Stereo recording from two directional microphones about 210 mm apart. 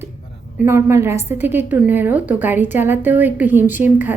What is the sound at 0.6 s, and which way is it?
Speech, 10° right (ahead or behind).